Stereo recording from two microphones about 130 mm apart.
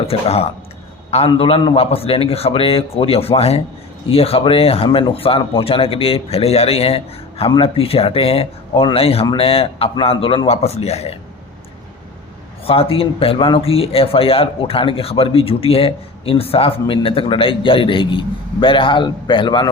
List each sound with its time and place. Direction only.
0.1 s speech: 50° left (ahead or behind)
12.6 s speech: 45° left (ahead or behind)